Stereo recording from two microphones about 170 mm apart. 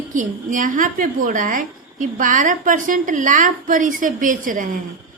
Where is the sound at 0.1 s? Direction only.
50° right (ahead or behind).